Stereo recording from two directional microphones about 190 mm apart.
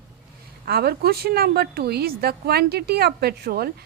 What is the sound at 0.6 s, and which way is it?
A woman's voice, 55° right (ahead or behind).